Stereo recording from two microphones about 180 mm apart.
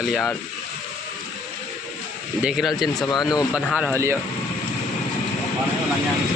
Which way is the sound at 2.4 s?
Centre (ahead or behind).